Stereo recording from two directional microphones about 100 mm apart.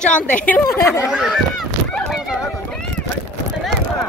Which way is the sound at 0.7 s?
30° left (ahead or behind).